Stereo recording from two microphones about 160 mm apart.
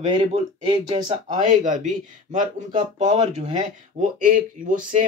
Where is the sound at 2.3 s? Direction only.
50° right (ahead or behind).